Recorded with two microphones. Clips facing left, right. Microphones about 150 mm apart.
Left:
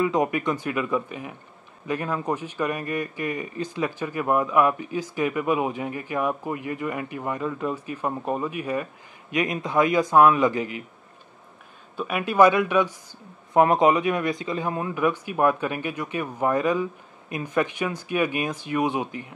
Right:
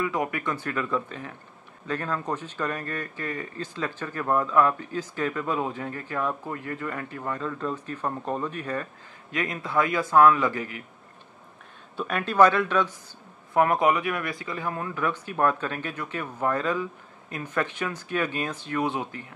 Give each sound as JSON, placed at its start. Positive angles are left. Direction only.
{"t": 0.0, "sound": "a man's voice", "side_deg": 20}
{"t": 12.0, "sound": "a man's voice", "side_deg": 10}